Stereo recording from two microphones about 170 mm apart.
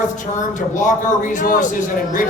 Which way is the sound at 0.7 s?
50° left (ahead or behind).